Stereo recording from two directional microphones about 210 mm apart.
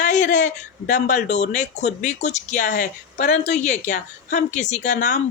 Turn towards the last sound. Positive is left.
turn(degrees=35)  # may be behind; listen again after turning